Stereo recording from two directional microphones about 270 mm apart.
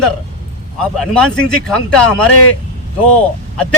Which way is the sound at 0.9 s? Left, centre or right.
Centre.